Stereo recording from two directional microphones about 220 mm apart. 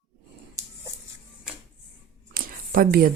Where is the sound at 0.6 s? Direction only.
15° right (ahead or behind).